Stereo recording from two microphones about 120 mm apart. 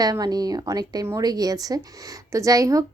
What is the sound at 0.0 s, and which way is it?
A woman's voice, 35° right (ahead or behind).